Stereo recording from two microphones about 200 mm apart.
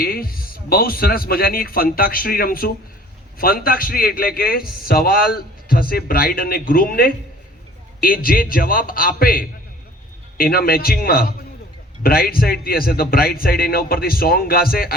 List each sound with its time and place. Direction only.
0.0 s a man's voice: 50° left (ahead or behind)